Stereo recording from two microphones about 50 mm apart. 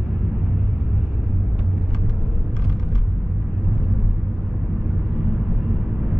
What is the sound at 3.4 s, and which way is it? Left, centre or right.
Vehicle, centre.